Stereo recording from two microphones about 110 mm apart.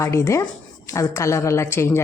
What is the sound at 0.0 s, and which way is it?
A woman's voice, 25° left (ahead or behind).